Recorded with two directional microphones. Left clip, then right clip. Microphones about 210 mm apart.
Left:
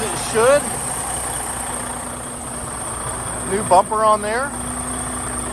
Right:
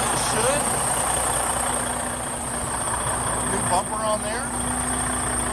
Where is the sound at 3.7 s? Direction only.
5° right (ahead or behind).